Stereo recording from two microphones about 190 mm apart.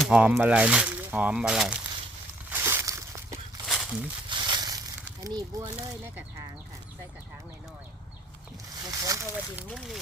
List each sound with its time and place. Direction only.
0.0 s speech: 5° right (ahead or behind)
2.5 s a sound: 10° right (ahead or behind)
3.7 s a sound: centre (ahead or behind)
4.3 s crumpling: 25° right (ahead or behind)
5.2 s speech: 20° right (ahead or behind)
8.9 s speech: 15° right (ahead or behind)
9.6 s speech: centre (ahead or behind)